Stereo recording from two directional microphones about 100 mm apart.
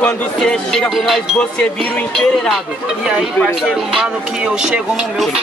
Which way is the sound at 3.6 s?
10° right (ahead or behind).